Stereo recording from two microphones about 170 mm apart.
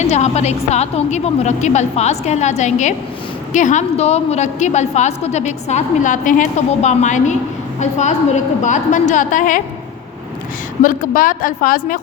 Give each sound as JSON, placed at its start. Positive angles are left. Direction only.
{"t": 0.0, "sound": "a woman's voice", "side_deg": 40}
{"t": 10.8, "sound": "a woman's voice", "side_deg": 50}